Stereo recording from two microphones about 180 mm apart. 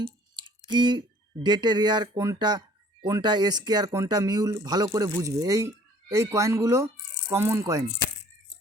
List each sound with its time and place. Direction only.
0.7 s speech: 25° right (ahead or behind)